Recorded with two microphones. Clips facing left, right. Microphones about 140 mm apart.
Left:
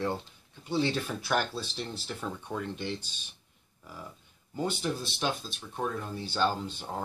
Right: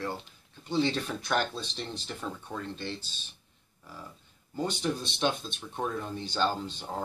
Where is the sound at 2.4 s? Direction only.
15° left (ahead or behind).